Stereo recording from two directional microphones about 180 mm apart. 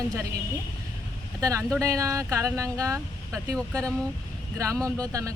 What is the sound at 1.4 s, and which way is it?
Speech, 15° right (ahead or behind).